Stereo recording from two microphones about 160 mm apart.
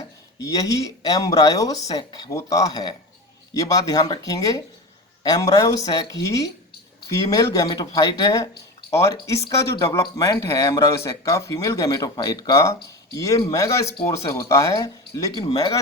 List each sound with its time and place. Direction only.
0.4 s speech: 20° left (ahead or behind)